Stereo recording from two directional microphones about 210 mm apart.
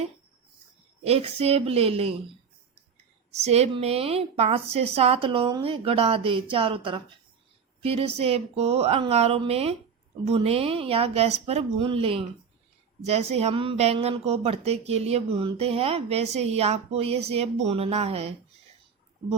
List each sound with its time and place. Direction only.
1.0 s speech: 30° right (ahead or behind)
3.3 s speech: 30° right (ahead or behind)